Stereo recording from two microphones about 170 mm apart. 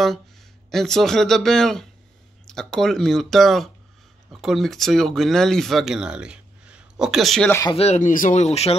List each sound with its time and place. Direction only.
0.7 s speech: centre (ahead or behind)
7.7 s speech: 40° left (ahead or behind)